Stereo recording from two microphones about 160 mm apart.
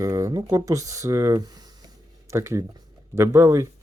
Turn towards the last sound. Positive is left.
turn(degrees=-20)  # may be behind; listen again after turning